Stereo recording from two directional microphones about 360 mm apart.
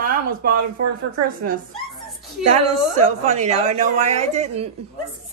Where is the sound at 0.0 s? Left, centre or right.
Right.